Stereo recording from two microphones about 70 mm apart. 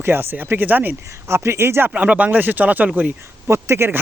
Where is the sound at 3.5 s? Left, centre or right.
Right.